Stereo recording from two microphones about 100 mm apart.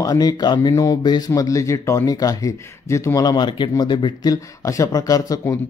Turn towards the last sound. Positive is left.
turn(degrees=35)  # may be behind; listen again after turning